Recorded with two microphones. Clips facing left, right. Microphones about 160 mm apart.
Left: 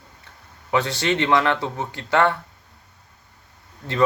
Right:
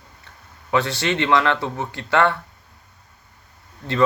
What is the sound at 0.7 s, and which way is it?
Speech, 20° left (ahead or behind).